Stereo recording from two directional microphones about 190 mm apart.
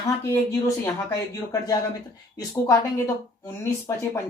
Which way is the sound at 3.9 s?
15° left (ahead or behind).